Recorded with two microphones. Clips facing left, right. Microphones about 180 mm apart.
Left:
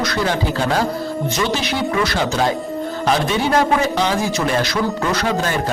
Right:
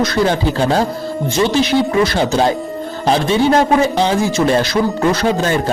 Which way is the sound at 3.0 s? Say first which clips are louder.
Right 5 dB; 30° right (ahead or behind).